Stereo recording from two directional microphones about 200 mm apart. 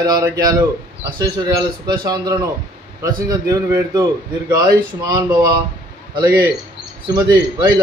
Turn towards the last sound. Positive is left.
turn(degrees=-20)  # may be behind; listen again after turning